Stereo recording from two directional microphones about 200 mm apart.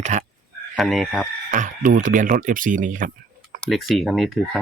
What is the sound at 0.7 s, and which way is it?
Speech, centre (ahead or behind).